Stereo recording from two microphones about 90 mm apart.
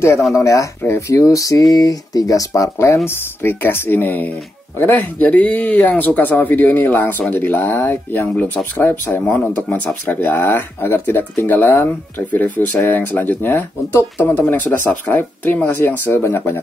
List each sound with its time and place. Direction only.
0.3 s speech: 35° left (ahead or behind)